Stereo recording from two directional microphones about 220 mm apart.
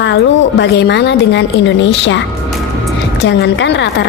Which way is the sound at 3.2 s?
55° left (ahead or behind).